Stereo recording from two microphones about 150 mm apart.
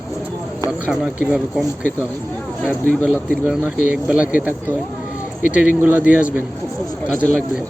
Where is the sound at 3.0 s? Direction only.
10° right (ahead or behind).